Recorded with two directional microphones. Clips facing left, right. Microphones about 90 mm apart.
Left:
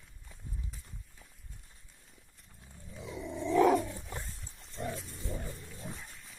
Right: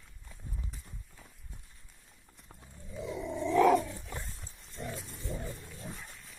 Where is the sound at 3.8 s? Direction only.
25° left (ahead or behind).